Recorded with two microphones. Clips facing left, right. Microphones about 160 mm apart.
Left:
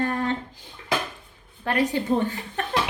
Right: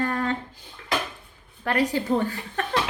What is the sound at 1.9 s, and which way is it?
Speech, 20° left (ahead or behind).